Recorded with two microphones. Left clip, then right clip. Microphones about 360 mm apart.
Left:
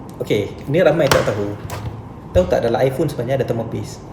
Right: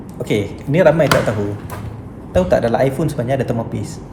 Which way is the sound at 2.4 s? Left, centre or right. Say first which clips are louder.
Right 2 dB; centre.